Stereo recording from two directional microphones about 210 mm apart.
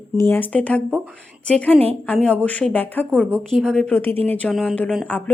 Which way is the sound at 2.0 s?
5° left (ahead or behind).